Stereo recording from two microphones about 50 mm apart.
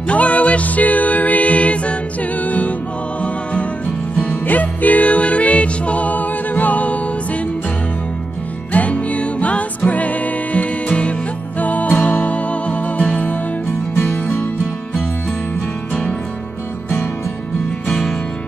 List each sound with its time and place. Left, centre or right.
0.1 s music: left
8.7 s music: left